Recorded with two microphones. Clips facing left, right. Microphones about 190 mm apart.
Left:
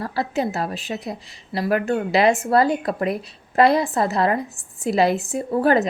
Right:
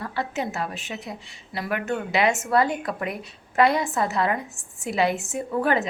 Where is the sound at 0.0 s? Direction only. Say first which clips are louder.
Left 5 dB; 35° left (ahead or behind).